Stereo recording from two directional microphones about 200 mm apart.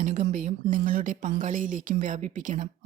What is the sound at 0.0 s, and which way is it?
Speech, 40° right (ahead or behind).